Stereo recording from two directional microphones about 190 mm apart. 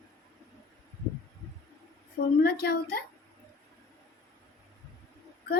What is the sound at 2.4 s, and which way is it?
Speech, 55° left (ahead or behind).